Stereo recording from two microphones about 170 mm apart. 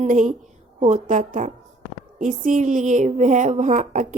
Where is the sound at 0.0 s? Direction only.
45° right (ahead or behind).